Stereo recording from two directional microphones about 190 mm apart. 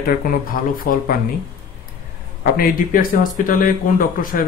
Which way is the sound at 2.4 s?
50° left (ahead or behind).